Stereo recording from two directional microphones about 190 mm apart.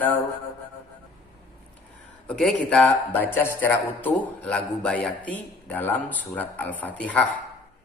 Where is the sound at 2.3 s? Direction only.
5° left (ahead or behind).